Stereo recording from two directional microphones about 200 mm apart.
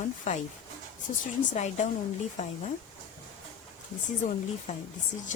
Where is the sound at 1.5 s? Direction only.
35° left (ahead or behind).